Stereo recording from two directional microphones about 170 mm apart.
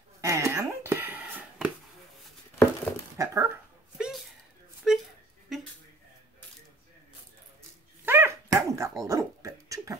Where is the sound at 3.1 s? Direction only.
15° right (ahead or behind).